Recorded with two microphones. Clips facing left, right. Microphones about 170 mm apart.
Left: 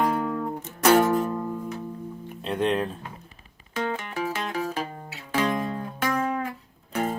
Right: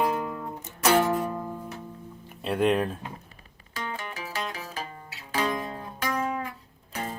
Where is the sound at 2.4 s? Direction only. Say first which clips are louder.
Right 1 dB; 5° right (ahead or behind).